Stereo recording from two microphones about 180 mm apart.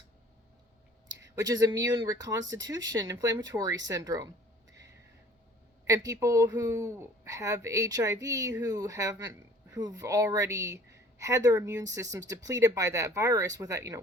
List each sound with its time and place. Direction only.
1.2 s speech: 20° right (ahead or behind)
2.6 s speech: 90° right
2.9 s speech: 20° right (ahead or behind)
5.9 s speech: 20° right (ahead or behind)